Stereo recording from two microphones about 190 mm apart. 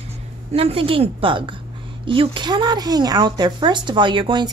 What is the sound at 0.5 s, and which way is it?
Speech, 30° right (ahead or behind).